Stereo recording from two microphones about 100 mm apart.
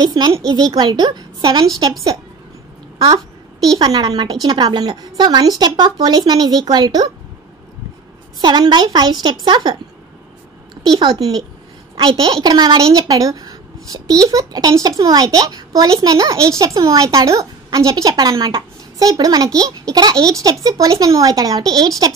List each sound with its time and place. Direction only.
0.0 s a woman's voice: 45° right (ahead or behind)
3.7 s a woman's voice: 40° right (ahead or behind)
8.4 s speech: 45° right (ahead or behind)
11.0 s a woman's voice: 40° right (ahead or behind)